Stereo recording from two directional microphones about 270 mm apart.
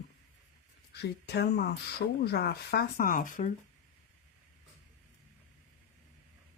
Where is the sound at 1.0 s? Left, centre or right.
Left.